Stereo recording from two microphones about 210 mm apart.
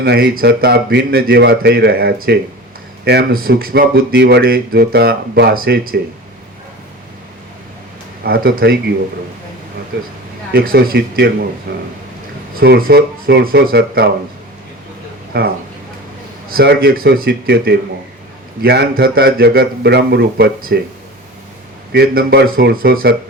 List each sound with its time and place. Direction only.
0.0 s speech: 50° right (ahead or behind)
8.2 s speech: 45° right (ahead or behind)
9.9 s speech: 50° right (ahead or behind)
15.3 s speech: 45° right (ahead or behind)
21.9 s speech: 50° right (ahead or behind)